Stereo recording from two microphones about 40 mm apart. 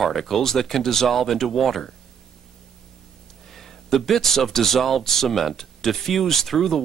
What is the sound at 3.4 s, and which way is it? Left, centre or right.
Speech, centre.